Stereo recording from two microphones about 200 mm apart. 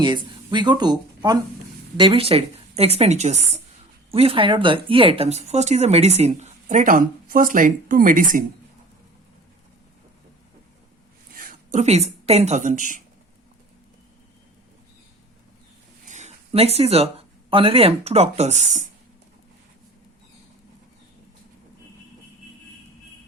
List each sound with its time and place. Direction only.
0.0 s speech: 20° right (ahead or behind); by 8.4 s 40° right (ahead or behind)
11.3 s a woman's voice: 40° right (ahead or behind)
16.0 s speech: 35° right (ahead or behind)